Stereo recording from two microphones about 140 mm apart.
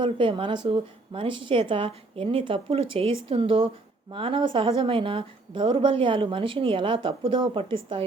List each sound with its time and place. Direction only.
0.0 s a woman's voice: 40° right (ahead or behind)